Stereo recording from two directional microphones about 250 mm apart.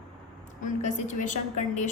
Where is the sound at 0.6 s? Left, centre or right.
Left.